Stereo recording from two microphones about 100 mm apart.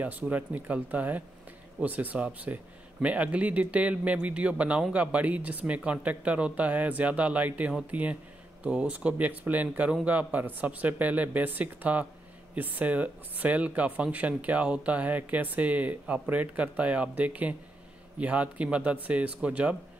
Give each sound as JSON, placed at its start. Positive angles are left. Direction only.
{"t": 0.0, "sound": "speech", "side_deg": -15}